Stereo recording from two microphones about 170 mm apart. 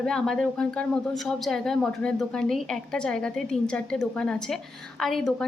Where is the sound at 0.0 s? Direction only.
5° left (ahead or behind).